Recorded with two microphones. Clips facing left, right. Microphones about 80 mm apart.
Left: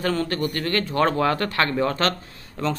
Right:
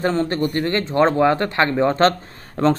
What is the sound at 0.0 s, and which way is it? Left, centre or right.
Speech, right.